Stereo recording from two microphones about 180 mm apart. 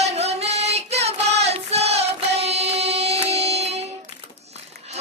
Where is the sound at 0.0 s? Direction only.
35° right (ahead or behind).